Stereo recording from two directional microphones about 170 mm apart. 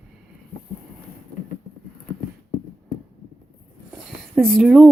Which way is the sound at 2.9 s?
60° left (ahead or behind).